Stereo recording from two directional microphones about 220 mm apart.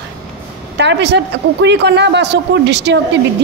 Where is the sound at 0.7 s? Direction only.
50° right (ahead or behind).